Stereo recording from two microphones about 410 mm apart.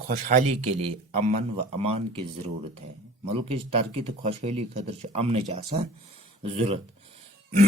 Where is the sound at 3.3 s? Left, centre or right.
Centre.